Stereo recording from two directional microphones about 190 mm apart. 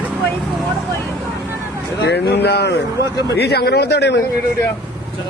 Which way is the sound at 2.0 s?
60° left (ahead or behind).